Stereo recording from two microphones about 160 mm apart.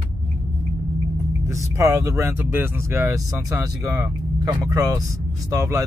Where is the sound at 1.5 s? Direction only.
15° right (ahead or behind).